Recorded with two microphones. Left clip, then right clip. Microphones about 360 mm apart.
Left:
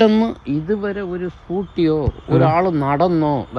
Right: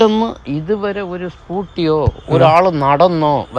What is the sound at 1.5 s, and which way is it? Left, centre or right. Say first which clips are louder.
Speech: right 2 dB; right.